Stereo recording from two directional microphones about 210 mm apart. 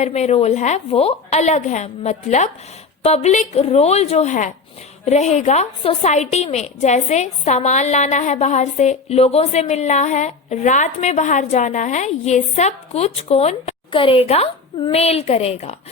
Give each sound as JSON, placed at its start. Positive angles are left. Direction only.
{"t": 0.0, "sound": "a woman's voice", "side_deg": 30}